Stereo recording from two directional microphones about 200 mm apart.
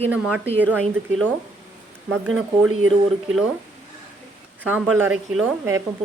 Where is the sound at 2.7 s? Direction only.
90° right.